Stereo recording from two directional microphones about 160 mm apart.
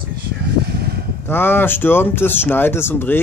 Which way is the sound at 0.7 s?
80° right.